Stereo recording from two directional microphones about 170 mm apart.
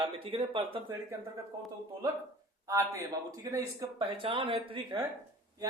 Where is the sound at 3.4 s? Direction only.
20° right (ahead or behind).